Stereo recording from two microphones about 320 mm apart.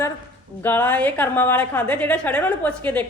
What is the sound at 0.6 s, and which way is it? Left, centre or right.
A woman's voice, centre.